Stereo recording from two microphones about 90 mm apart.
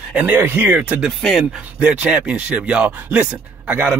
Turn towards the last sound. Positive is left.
turn(degrees=-15)  # may be behind; listen again after turning